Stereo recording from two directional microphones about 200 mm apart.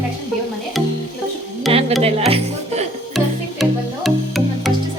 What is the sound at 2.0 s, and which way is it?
Speech, 30° right (ahead or behind).